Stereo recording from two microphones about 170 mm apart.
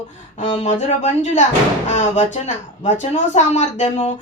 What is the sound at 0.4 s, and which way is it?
Speech, 35° left (ahead or behind).